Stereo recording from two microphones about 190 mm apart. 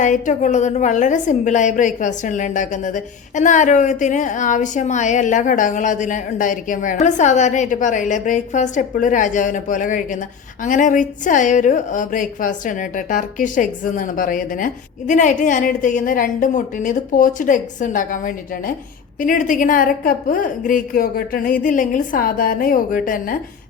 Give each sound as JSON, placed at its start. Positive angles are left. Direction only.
{"t": 0.0, "sound": "a woman's voice", "side_deg": 40}